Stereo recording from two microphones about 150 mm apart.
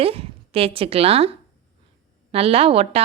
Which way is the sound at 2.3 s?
40° right (ahead or behind).